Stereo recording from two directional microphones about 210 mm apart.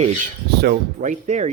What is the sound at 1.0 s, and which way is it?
Speech, 35° right (ahead or behind).